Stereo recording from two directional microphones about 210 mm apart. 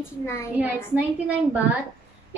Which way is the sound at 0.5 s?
5° right (ahead or behind).